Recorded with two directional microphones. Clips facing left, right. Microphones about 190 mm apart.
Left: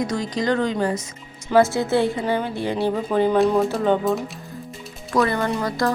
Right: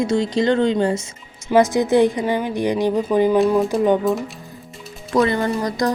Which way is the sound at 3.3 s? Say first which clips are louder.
Right 2 dB; centre (ahead or behind).